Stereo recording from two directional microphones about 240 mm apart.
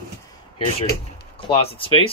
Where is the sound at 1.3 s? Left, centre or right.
Left.